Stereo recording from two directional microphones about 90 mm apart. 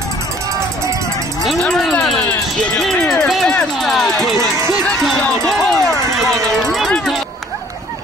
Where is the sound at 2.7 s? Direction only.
5° left (ahead or behind).